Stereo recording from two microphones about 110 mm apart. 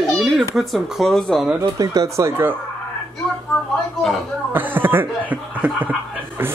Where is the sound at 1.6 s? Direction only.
35° right (ahead or behind).